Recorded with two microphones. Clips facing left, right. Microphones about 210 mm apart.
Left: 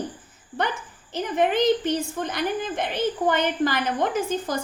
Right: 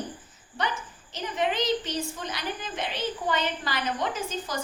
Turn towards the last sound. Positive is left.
turn(degrees=55)  # may be behind; listen again after turning